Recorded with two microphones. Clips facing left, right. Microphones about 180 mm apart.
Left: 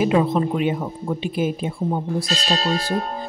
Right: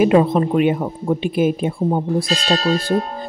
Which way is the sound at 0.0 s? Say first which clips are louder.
Right 4 dB; 55° right (ahead or behind).